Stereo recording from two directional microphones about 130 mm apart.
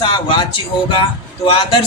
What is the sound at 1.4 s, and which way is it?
Speech, 40° left (ahead or behind).